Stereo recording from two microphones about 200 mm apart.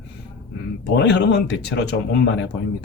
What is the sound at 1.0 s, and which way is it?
Speech, 60° left (ahead or behind).